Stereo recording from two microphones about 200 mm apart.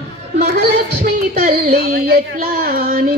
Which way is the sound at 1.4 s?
50° right (ahead or behind).